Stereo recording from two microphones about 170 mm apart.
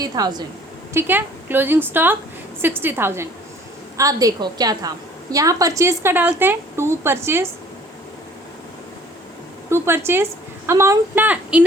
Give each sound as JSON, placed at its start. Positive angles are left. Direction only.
{"t": 0.0, "sound": "a woman's voice", "side_deg": -25}
{"t": 0.9, "sound": "a woman's voice", "side_deg": -10}
{"t": 9.6, "sound": "a woman's voice", "side_deg": -15}